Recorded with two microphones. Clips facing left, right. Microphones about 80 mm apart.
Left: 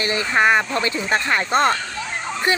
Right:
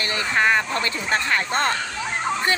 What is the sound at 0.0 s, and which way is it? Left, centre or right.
A woman's voice, centre.